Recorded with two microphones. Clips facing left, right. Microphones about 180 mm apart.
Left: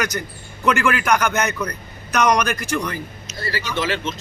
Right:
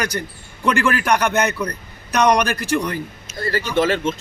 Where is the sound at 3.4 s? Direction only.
50° right (ahead or behind).